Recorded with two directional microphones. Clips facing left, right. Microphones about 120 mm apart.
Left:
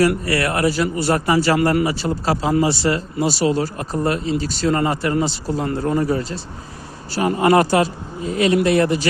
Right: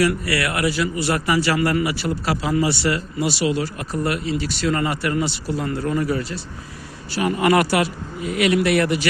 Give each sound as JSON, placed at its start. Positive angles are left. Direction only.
{"t": 0.3, "sound": "speech", "side_deg": 35}